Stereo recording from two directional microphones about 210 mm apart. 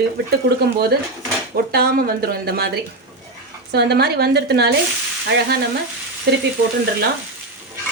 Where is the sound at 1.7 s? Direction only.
45° right (ahead or behind).